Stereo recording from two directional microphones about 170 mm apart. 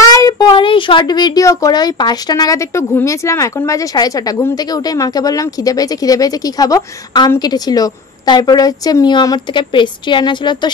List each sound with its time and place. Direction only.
0.1 s speech: 20° left (ahead or behind)